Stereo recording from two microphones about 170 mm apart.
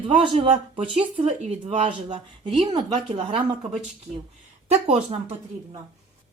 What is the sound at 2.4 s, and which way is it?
Speech, 30° right (ahead or behind).